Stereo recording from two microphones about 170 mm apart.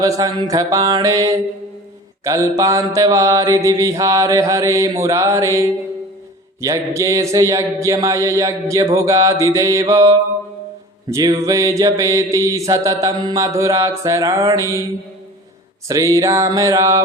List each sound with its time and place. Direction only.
0.0 s mantra: 20° right (ahead or behind)
11.4 s mantra: 20° right (ahead or behind)
15.9 s mantra: 20° right (ahead or behind)